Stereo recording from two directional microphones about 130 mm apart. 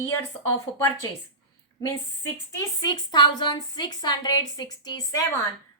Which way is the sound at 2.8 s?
35° left (ahead or behind).